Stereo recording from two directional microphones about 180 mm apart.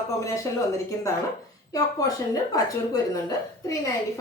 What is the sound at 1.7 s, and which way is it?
A woman's voice, 20° left (ahead or behind).